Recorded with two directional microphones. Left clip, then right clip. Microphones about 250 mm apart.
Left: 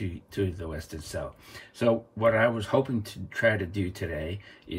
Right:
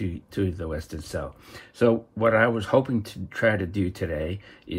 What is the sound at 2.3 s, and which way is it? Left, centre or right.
Speech, centre.